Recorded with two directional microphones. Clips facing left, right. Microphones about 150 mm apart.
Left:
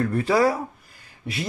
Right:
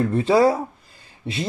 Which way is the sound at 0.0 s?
25° right (ahead or behind).